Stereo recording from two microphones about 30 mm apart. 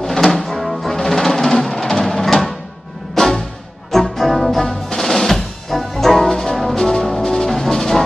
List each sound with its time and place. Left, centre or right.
0.0 s music: centre
0.4 s music: centre